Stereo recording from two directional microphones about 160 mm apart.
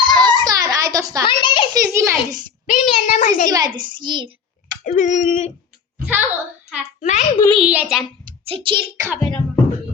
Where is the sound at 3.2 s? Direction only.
55° left (ahead or behind).